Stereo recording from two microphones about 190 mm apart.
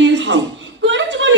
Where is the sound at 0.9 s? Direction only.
75° right (ahead or behind).